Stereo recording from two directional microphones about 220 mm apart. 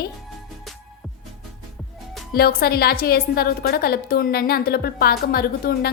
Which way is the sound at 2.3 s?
45° left (ahead or behind).